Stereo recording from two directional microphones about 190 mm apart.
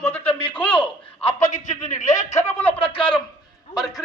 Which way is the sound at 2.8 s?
30° left (ahead or behind).